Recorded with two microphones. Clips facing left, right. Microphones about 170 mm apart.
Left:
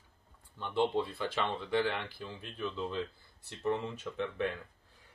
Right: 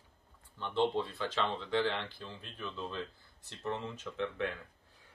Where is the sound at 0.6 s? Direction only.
10° left (ahead or behind).